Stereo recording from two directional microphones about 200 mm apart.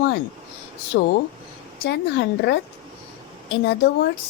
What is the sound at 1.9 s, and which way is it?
Speech, 60° left (ahead or behind).